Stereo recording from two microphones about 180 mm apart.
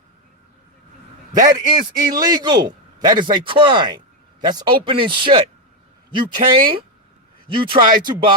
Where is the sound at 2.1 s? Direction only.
20° right (ahead or behind).